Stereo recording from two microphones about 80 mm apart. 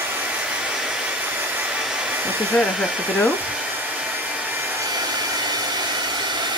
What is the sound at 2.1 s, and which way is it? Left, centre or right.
Hair dryer, right.